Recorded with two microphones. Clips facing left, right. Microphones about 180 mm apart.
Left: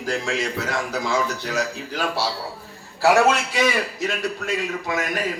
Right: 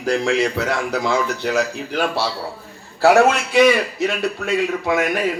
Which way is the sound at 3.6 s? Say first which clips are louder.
Right 8 dB; 60° right (ahead or behind).